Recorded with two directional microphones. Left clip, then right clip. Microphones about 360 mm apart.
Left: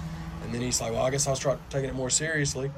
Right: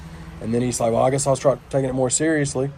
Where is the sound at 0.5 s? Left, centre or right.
Centre.